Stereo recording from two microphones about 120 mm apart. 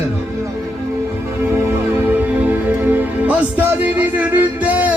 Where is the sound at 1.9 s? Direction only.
15° right (ahead or behind).